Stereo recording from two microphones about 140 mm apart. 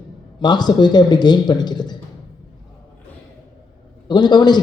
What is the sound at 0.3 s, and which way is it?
A man's voice, 30° left (ahead or behind).